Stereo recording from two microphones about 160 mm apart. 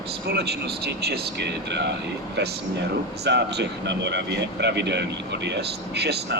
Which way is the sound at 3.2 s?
90° right.